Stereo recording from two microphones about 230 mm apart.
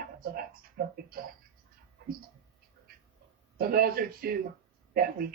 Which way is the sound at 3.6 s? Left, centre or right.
Right.